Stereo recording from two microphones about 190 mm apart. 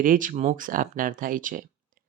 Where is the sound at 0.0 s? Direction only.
45° right (ahead or behind).